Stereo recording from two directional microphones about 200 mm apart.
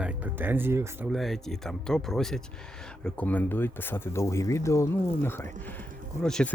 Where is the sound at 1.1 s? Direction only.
Centre (ahead or behind).